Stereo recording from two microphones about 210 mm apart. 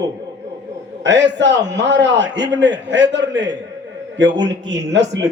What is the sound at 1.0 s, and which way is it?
A man's voice, 55° right (ahead or behind).